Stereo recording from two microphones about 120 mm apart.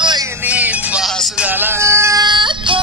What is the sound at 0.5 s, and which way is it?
Music, 10° right (ahead or behind).